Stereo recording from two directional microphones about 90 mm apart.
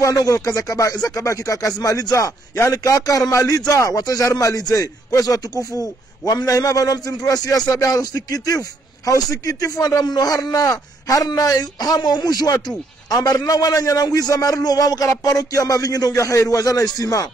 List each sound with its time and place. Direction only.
0.0 s a man's voice: 40° left (ahead or behind)